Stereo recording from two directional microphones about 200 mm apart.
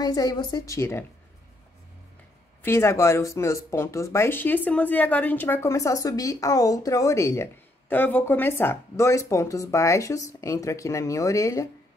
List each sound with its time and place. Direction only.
0.0 s speech: 20° left (ahead or behind)
2.6 s speech: 15° left (ahead or behind)